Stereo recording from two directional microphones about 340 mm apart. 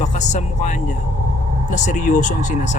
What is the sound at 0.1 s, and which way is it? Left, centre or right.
Speech, left.